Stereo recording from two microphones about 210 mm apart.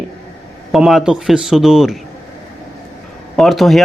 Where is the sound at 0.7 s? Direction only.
Centre (ahead or behind).